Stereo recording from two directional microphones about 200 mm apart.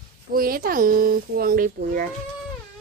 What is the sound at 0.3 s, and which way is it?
Speech, 45° right (ahead or behind).